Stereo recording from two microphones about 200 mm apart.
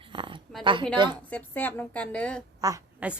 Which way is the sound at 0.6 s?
25° right (ahead or behind).